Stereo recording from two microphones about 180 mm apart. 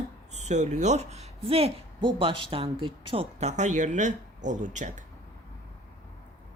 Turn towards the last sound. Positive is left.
turn(degrees=-45)  # may be behind; listen again after turning